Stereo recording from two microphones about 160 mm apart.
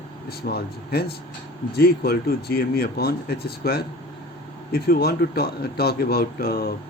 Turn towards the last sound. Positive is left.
turn(degrees=70)  # may be behind; listen again after turning